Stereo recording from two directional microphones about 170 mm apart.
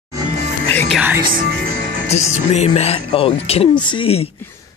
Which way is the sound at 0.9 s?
10° right (ahead or behind).